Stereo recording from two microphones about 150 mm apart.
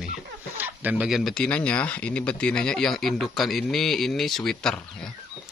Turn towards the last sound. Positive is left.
turn(degrees=5)  # may be behind; listen again after turning